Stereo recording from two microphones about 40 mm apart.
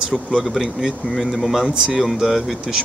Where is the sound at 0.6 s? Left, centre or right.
Centre.